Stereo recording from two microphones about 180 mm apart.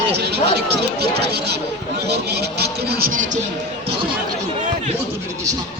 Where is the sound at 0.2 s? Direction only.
65° right (ahead or behind); by 3.4 s 45° right (ahead or behind).